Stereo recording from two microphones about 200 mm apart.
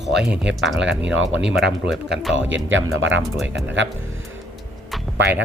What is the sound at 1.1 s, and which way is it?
Speech, 65° right (ahead or behind).